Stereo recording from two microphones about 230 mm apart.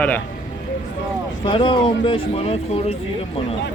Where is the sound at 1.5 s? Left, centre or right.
Left.